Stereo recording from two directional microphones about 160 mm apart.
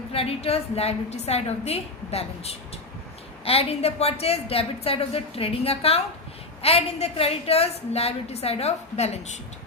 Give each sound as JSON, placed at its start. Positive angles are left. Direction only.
{"t": 0.1, "sound": "a woman's voice", "side_deg": 35}